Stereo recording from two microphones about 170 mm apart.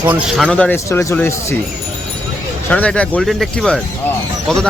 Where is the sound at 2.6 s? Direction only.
10° left (ahead or behind).